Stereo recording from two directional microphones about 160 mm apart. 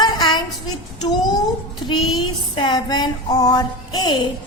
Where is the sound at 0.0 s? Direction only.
25° left (ahead or behind).